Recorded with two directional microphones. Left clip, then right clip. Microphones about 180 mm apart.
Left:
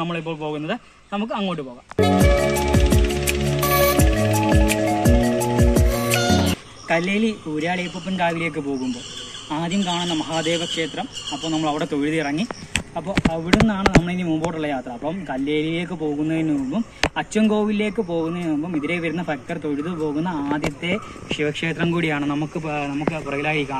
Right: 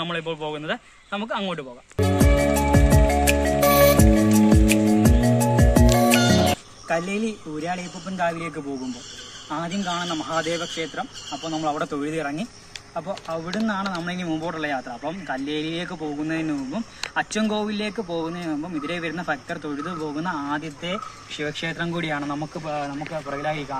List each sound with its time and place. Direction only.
0.0 s a man's voice: 10° right (ahead or behind)
2.0 s music: centre (ahead or behind)
7.0 s speech: 40° right (ahead or behind)
8.2 s speech: 10° left (ahead or behind)
13.3 s speech: 5° left (ahead or behind)